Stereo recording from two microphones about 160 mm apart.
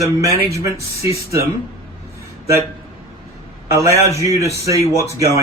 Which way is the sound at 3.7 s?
20° right (ahead or behind).